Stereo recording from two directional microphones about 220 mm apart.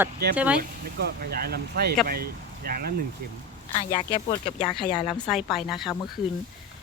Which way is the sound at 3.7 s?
30° left (ahead or behind).